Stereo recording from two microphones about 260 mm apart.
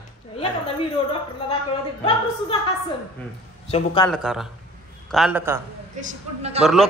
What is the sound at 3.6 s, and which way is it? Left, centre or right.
Speech, left.